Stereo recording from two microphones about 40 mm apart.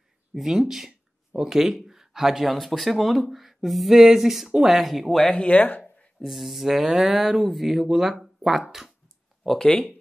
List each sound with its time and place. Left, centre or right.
0.3 s speech: centre
5.5 s speech: left
6.2 s speech: centre
9.6 s speech: centre